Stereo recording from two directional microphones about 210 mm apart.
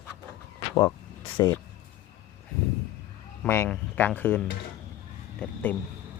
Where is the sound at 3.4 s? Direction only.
10° left (ahead or behind).